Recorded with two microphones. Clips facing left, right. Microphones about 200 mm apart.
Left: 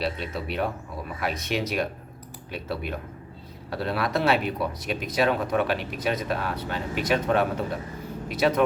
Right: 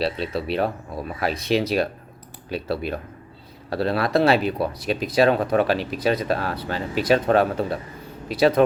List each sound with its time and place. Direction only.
0.0 s speech: 30° right (ahead or behind)